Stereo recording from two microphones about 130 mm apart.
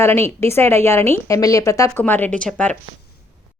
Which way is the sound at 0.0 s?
15° left (ahead or behind).